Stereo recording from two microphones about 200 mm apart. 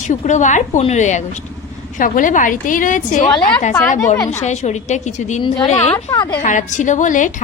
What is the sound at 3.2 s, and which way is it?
Speech, 20° left (ahead or behind).